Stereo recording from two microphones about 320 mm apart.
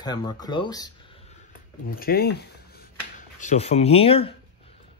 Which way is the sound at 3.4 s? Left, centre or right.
Left.